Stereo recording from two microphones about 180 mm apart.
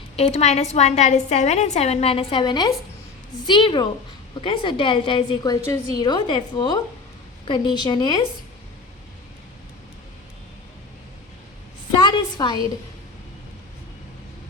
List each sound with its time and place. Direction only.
0.2 s a woman's voice: 35° left (ahead or behind)
11.9 s a woman's voice: 25° left (ahead or behind)